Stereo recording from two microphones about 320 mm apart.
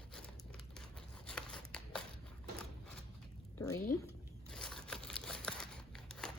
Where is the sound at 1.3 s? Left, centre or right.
Centre.